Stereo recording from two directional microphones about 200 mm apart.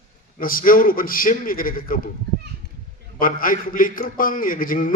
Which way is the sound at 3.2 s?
45° left (ahead or behind).